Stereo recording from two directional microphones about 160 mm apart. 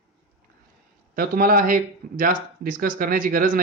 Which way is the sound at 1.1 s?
60° right (ahead or behind).